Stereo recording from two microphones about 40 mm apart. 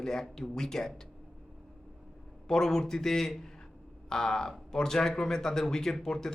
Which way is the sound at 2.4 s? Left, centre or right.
Centre.